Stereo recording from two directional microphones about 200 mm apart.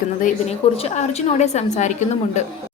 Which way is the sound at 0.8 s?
35° left (ahead or behind).